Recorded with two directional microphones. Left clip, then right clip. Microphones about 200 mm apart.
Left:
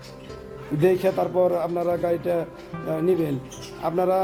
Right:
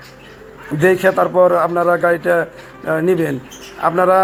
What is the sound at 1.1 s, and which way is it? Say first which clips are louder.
Speech: right 9 dB; 20° right (ahead or behind).